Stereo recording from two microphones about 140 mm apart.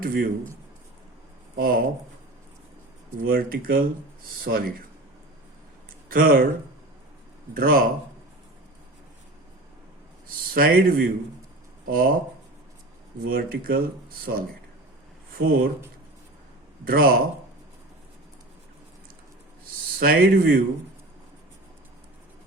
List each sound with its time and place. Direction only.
0.0 s speech: 90° right
1.5 s speech: 90° right
3.2 s speech: 90° right
6.1 s speech: 90° right
7.5 s speech: 90° right
10.2 s speech: 90° right
13.2 s speech: 90° right
16.8 s speech: 90° right
20.0 s speech: 90° right